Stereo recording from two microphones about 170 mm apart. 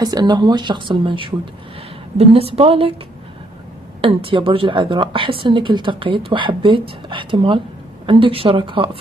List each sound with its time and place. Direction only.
0.0 s a woman's voice: 25° right (ahead or behind)
4.0 s a woman's voice: 30° right (ahead or behind)